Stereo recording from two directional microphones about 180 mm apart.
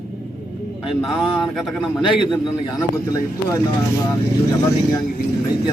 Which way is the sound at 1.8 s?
25° left (ahead or behind).